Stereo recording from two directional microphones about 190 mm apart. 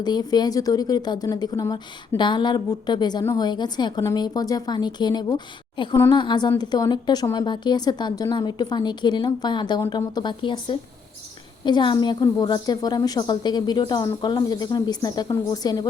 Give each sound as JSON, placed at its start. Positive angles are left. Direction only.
{"t": 0.0, "sound": "a woman's voice", "side_deg": 20}